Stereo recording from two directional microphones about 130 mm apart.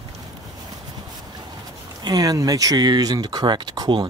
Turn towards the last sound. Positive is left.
turn(degrees=-30)  # may be behind; listen again after turning